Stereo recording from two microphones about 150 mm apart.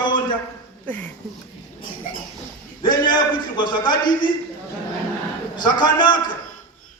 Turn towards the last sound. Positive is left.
turn(degrees=30)  # may be behind; listen again after turning